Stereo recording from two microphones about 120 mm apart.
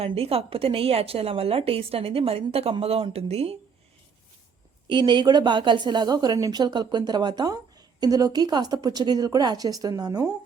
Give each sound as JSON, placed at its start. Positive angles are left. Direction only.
{"t": 0.0, "sound": "a woman's voice", "side_deg": -55}
{"t": 4.9, "sound": "a woman's voice", "side_deg": -40}